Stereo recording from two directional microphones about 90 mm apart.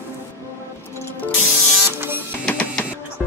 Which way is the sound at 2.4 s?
10° left (ahead or behind).